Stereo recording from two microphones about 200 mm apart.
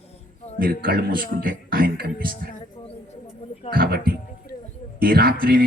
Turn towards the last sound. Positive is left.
turn(degrees=-50)  # may be behind; listen again after turning